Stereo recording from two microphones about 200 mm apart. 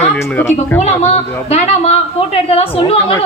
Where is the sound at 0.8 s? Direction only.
30° left (ahead or behind).